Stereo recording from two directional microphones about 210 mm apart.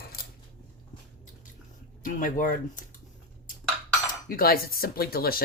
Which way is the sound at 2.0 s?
40° left (ahead or behind).